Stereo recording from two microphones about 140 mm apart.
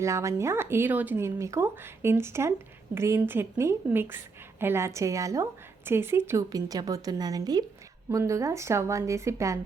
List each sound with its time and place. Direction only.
0.0 s a woman's voice: 20° right (ahead or behind)